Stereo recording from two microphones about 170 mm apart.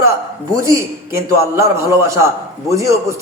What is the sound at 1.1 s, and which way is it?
A man's voice, 15° right (ahead or behind).